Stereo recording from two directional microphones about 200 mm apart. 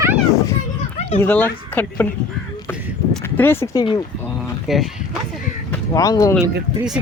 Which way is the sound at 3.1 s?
10° left (ahead or behind).